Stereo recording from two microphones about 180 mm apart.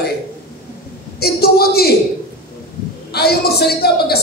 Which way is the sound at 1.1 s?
60° left (ahead or behind).